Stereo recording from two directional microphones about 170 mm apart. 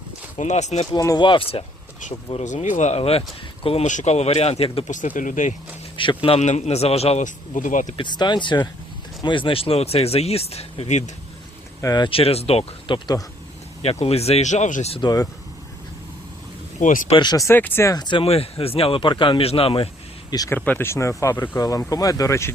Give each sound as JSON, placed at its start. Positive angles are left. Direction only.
{"t": 0.3, "sound": "speech", "side_deg": 45}
{"t": 0.9, "sound": "speech", "side_deg": 20}
{"t": 2.0, "sound": "a man's voice", "side_deg": 45}
{"t": 4.9, "sound": "speech", "side_deg": 50}
{"t": 6.0, "sound": "a man's voice", "side_deg": 30}
{"t": 7.9, "sound": "a man's voice", "side_deg": 25}
{"t": 11.8, "sound": "a man's voice", "side_deg": 25}
{"t": 15.0, "sound": "speech", "side_deg": 20}
{"t": 17.1, "sound": "speech", "side_deg": 25}
{"t": 20.3, "sound": "speech", "side_deg": 20}